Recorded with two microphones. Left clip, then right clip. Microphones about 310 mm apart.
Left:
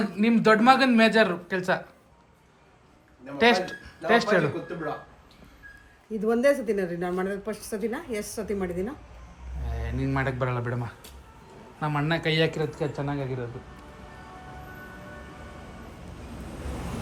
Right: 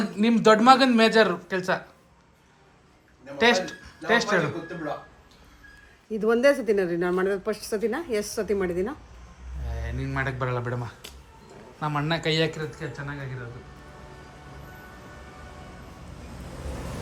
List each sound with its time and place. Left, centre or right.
0.0 s a man's voice: centre
3.3 s a man's voice: centre
6.1 s a woman's voice: right
9.6 s a man's voice: centre